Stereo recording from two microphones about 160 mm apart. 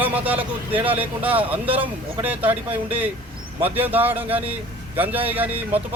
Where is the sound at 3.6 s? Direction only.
10° right (ahead or behind).